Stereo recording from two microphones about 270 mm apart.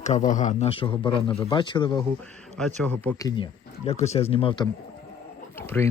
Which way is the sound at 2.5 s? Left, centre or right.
Centre.